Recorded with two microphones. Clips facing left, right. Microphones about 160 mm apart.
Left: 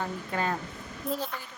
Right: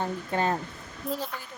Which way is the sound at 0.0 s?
30° right (ahead or behind).